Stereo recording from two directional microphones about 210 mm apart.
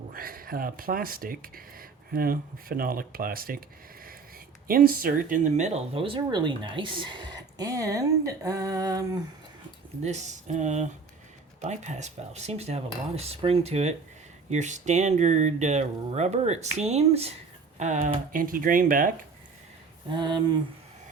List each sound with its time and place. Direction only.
0.1 s speech: 45° right (ahead or behind)
4.7 s speech: 45° right (ahead or behind); by 9.2 s 20° right (ahead or behind)
10.0 s speech: 35° right (ahead or behind)
20.1 s speech: 20° right (ahead or behind)